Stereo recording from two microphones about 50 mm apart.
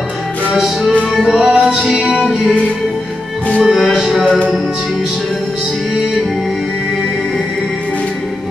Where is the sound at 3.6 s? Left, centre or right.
Centre.